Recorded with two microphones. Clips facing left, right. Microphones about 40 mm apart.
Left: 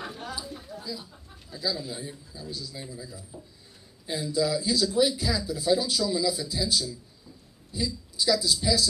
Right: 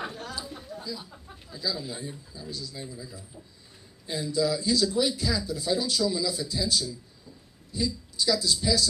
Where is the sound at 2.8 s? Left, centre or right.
Centre.